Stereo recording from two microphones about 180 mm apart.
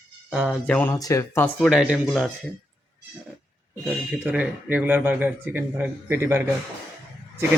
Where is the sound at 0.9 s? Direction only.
20° left (ahead or behind).